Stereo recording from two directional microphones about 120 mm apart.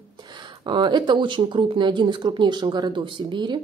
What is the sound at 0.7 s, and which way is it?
Speech, 40° right (ahead or behind).